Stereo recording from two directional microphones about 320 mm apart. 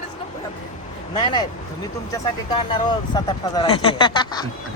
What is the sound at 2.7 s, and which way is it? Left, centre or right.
Speech, centre.